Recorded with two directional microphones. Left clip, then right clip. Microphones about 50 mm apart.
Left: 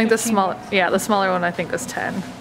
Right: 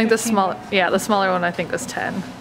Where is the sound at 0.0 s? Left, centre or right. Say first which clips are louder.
Even; centre.